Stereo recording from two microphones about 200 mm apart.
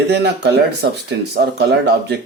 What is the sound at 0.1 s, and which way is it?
Speech, 55° right (ahead or behind).